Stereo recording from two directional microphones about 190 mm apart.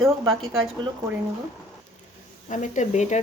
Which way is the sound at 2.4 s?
40° left (ahead or behind).